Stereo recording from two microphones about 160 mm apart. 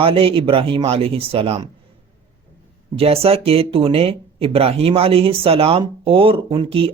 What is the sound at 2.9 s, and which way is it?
Speech, 35° right (ahead or behind).